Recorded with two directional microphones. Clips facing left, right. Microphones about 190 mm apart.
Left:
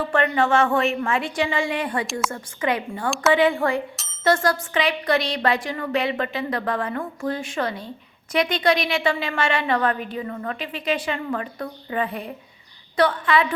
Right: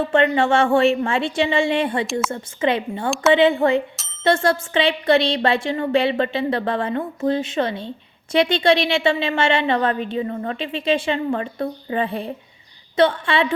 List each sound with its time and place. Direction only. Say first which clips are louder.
0.0 s speech: right 4 dB; 25° right (ahead or behind)